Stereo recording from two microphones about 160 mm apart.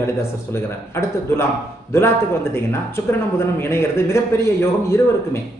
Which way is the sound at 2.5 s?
15° left (ahead or behind).